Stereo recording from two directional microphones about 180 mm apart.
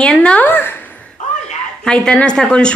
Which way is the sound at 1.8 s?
5° left (ahead or behind).